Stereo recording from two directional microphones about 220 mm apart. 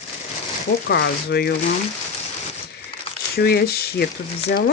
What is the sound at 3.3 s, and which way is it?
Speech, 45° left (ahead or behind).